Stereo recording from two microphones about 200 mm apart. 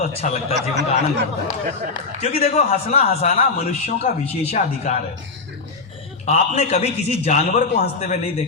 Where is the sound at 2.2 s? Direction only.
30° left (ahead or behind).